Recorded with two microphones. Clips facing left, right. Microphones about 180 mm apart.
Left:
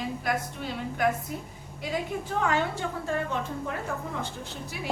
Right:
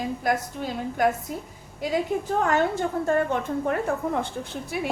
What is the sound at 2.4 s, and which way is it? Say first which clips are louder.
A woman's voice: right 3 dB; 45° right (ahead or behind).